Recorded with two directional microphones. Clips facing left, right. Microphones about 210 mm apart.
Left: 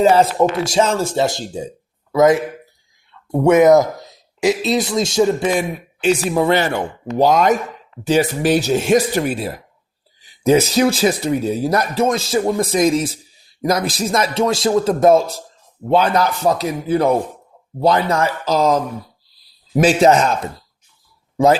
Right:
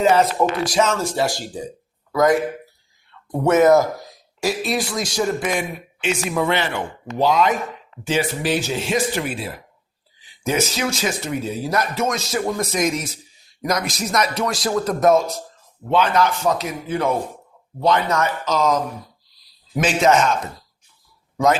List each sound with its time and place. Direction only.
0.0 s speech: 30° left (ahead or behind)
6.0 s speech: 35° left (ahead or behind)
19.8 s speech: 35° left (ahead or behind)